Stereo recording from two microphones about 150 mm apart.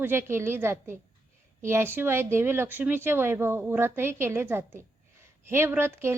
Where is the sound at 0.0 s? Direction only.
15° right (ahead or behind).